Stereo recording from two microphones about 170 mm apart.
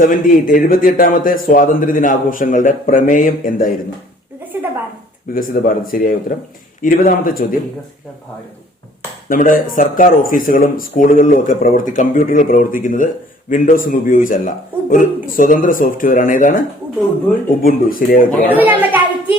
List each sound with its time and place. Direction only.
0.0 s speech: 50° left (ahead or behind)
4.5 s speech: 15° right (ahead or behind)
5.3 s speech: 55° left (ahead or behind)
9.3 s speech: 55° left (ahead or behind)
18.4 s a child's voice: 10° right (ahead or behind)